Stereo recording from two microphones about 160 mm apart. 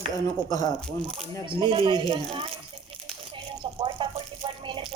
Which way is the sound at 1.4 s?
30° right (ahead or behind).